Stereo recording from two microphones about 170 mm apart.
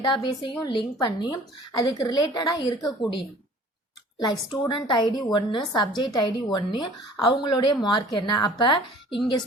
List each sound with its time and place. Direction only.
0.0 s speech: 25° left (ahead or behind)
4.7 s speech: 25° left (ahead or behind)